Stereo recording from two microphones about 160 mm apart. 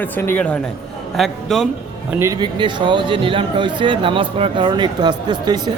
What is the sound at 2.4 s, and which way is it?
Speech, 30° right (ahead or behind).